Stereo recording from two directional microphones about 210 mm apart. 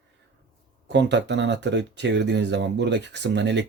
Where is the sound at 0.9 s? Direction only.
55° right (ahead or behind).